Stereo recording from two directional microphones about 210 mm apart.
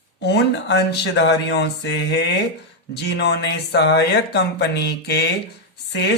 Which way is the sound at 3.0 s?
55° left (ahead or behind).